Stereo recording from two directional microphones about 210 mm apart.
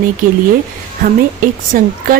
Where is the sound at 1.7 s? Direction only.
40° right (ahead or behind).